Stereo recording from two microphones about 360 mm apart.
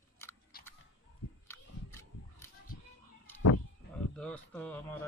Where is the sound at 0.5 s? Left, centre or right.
Left.